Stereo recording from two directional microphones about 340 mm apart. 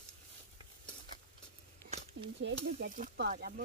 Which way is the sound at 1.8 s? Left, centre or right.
Centre.